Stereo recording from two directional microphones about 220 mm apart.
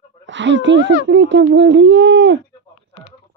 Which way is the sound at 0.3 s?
55° right (ahead or behind).